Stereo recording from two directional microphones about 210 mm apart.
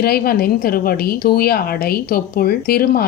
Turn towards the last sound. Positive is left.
turn(degrees=45)  # may be behind; listen again after turning